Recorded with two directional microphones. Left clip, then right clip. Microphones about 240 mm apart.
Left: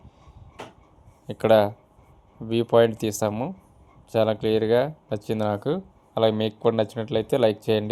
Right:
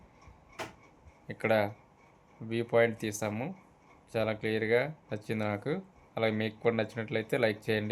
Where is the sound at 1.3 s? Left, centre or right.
Left.